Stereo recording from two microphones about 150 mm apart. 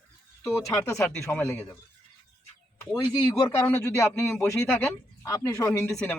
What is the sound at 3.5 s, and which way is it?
Speech, 15° left (ahead or behind).